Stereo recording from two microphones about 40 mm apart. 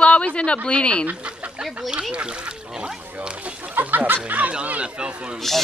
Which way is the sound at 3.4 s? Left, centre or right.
Right.